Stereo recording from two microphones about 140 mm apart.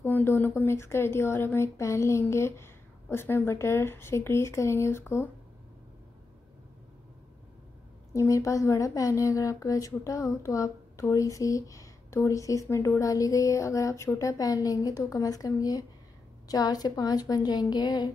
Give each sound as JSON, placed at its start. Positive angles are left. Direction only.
{"t": 0.0, "sound": "a woman's voice", "side_deg": 15}
{"t": 8.1, "sound": "speech", "side_deg": 20}